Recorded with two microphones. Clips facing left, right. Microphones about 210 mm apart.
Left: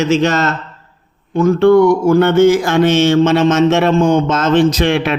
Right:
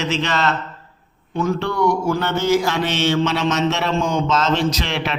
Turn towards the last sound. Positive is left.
turn(degrees=50)  # may be behind; listen again after turning